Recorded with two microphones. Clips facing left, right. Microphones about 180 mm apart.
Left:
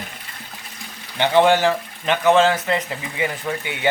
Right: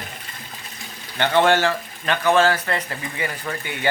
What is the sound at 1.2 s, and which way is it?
A man's voice, 15° left (ahead or behind).